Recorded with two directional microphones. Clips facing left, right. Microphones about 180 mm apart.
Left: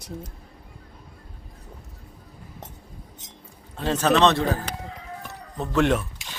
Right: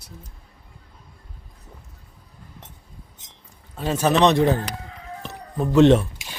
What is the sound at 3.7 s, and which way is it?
Speech, 10° right (ahead or behind).